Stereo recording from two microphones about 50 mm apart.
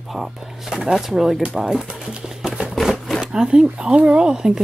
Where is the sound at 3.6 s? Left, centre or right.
Right.